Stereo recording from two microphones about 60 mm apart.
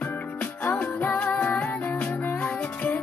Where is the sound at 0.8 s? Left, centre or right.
Left.